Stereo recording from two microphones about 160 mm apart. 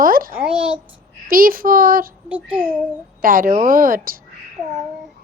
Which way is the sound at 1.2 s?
60° right (ahead or behind).